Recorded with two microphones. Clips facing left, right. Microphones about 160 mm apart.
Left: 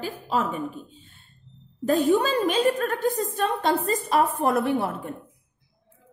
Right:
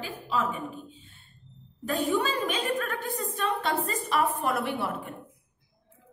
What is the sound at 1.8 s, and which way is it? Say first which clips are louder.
A woman's voice: left 6 dB; 40° left (ahead or behind).